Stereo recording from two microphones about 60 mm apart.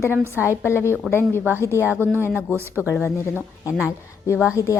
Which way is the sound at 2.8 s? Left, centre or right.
Left.